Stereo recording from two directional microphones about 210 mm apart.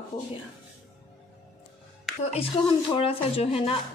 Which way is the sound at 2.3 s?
25° left (ahead or behind).